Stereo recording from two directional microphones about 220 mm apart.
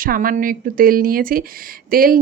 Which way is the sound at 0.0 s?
40° right (ahead or behind).